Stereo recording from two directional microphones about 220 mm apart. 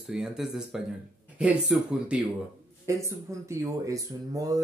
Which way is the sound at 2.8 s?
15° right (ahead or behind).